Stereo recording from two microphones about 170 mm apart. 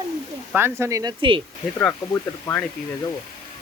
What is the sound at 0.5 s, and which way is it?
Speech, 15° right (ahead or behind).